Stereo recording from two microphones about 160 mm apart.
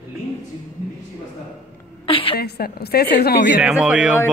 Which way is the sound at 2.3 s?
80° left.